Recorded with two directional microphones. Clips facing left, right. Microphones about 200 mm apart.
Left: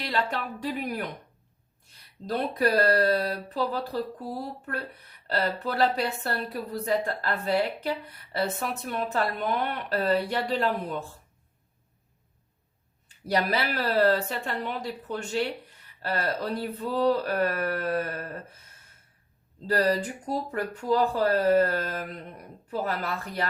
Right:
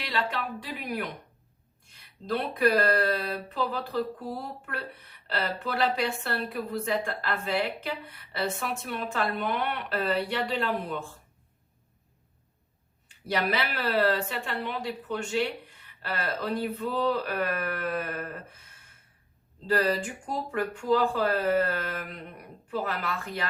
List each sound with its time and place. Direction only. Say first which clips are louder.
0.0 s a woman's voice: left 2 dB; 40° left (ahead or behind)
13.3 s a woman's voice: left 2 dB; 40° left (ahead or behind)
19.6 s a woman's voice: left 1 dB; 35° left (ahead or behind)